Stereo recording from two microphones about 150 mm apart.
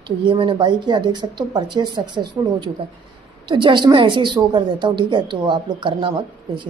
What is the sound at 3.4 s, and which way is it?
Speech, 30° right (ahead or behind).